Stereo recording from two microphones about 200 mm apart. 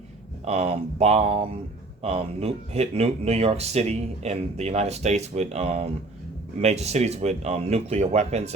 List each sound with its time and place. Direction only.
0.4 s speech: 30° right (ahead or behind)